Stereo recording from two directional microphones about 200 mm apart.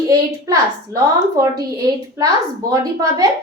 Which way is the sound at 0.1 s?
15° right (ahead or behind).